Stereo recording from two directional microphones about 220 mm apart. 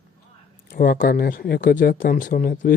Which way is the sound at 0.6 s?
45° left (ahead or behind).